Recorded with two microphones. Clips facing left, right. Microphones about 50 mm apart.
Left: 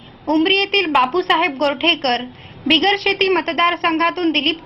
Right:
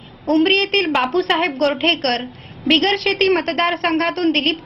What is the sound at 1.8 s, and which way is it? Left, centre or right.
A woman's voice, left.